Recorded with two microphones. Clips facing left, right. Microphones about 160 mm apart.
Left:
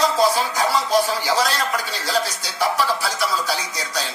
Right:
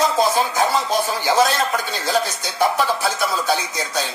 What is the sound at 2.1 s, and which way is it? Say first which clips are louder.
Speech: right 2 dB; 25° right (ahead or behind).